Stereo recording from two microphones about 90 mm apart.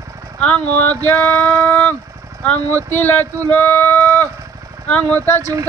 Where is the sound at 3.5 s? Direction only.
20° left (ahead or behind).